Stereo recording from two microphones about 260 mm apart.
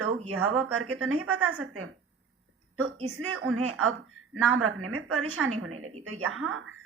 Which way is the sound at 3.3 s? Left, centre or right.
Right.